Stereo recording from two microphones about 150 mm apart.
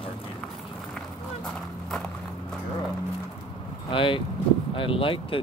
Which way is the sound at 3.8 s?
35° left (ahead or behind).